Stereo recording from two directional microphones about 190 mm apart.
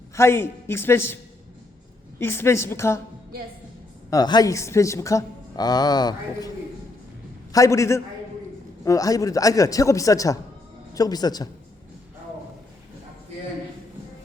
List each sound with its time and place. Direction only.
0.2 s a man's voice: 15° left (ahead or behind)
4.1 s a woman's voice: 20° left (ahead or behind)
7.5 s a man's voice: 15° left (ahead or behind)